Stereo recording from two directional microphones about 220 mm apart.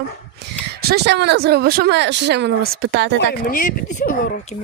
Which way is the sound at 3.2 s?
40° left (ahead or behind).